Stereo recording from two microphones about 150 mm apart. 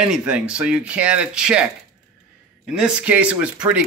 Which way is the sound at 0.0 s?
5° right (ahead or behind).